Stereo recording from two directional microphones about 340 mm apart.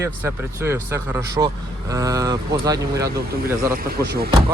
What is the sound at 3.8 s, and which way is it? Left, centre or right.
Speech, right.